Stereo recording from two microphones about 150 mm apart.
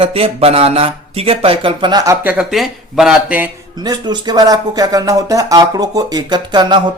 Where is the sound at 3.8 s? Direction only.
30° right (ahead or behind).